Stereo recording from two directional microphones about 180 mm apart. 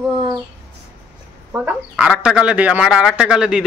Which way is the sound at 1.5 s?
10° right (ahead or behind).